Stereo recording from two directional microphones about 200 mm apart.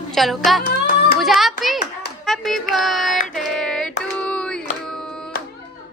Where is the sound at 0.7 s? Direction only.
45° left (ahead or behind).